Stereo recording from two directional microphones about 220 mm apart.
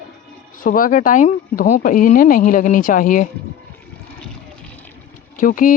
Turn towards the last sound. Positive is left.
turn(degrees=40)  # may be behind; listen again after turning